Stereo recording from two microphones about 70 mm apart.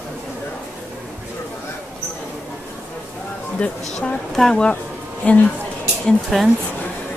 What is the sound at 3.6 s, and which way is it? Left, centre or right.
Speech, centre.